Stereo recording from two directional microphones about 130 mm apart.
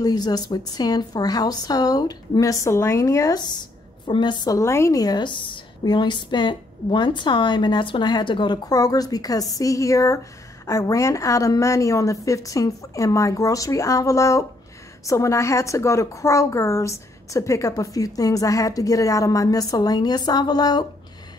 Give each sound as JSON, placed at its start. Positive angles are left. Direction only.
{"t": 0.0, "sound": "a woman's voice", "side_deg": 30}